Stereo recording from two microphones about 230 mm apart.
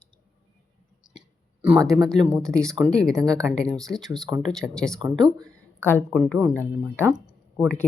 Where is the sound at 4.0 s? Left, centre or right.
Centre.